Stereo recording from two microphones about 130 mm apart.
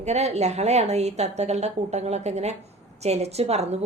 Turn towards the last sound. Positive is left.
turn(degrees=-55)  # may be behind; listen again after turning